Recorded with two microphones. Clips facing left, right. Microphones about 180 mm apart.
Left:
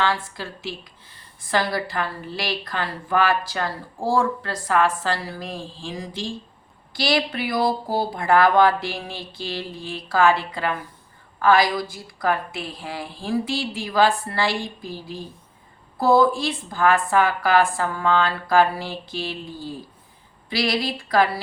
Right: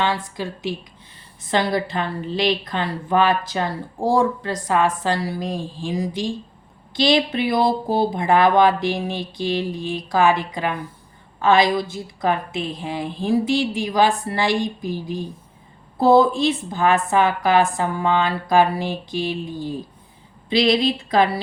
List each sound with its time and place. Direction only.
0.0 s a woman's voice: 15° right (ahead or behind)